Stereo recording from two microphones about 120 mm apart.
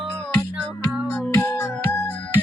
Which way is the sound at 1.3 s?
15° left (ahead or behind).